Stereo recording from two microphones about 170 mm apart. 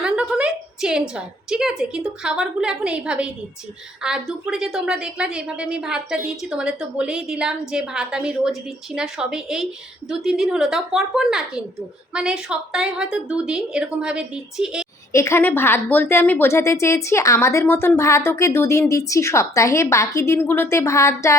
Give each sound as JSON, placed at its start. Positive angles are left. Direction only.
{"t": 0.0, "sound": "a sound", "side_deg": -5}
{"t": 1.8, "sound": "a woman's voice", "side_deg": -5}
{"t": 15.1, "sound": "a woman's voice", "side_deg": 15}